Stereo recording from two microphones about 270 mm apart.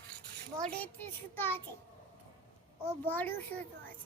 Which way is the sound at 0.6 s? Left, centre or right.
Centre.